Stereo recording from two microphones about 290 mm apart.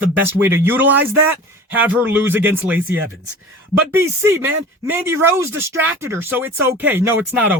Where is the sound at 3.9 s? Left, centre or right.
Centre.